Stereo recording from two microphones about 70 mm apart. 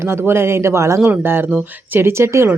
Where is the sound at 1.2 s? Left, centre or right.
Right.